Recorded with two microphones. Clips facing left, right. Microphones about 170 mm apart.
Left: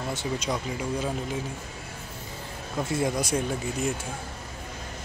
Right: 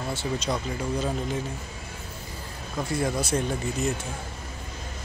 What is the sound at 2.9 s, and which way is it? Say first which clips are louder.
Speech: even; 20° left (ahead or behind).